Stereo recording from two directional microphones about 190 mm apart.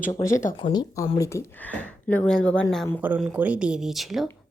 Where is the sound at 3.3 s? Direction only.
5° right (ahead or behind).